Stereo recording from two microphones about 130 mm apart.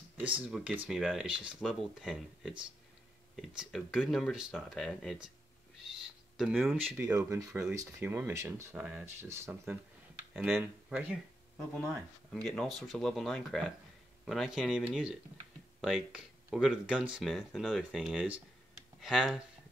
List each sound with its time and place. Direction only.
0.4 s speech: 5° right (ahead or behind)
6.3 s speech: centre (ahead or behind)
7.0 s speech: 20° right (ahead or behind)
8.7 s speech: 10° right (ahead or behind)
10.3 s speech: 5° right (ahead or behind)
11.5 s speech: 5° left (ahead or behind)